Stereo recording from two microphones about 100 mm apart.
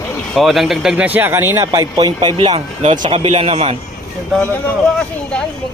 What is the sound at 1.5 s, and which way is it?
Speech, 35° right (ahead or behind).